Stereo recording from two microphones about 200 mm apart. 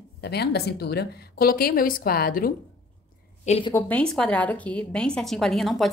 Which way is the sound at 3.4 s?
30° left (ahead or behind).